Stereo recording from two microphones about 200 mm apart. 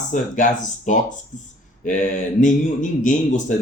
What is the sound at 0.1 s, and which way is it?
Speech, 40° left (ahead or behind).